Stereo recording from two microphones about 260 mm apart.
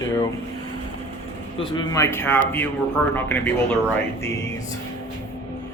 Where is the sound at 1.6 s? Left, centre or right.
Centre.